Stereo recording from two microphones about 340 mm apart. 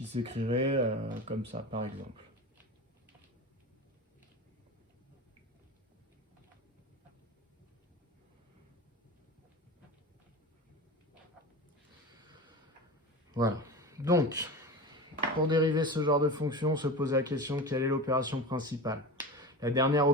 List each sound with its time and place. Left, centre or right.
0.1 s a man's voice: centre
13.3 s speech: centre
15.4 s a man's voice: centre